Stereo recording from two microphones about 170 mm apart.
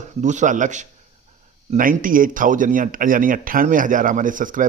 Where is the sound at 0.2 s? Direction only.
45° right (ahead or behind).